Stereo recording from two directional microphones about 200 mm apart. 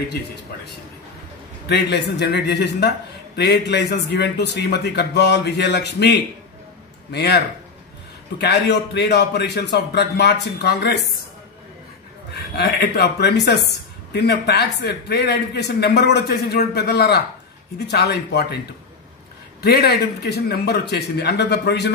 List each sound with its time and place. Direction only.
1.7 s speech: 60° left (ahead or behind)
12.5 s speech: 55° left (ahead or behind)
19.6 s speech: 50° left (ahead or behind)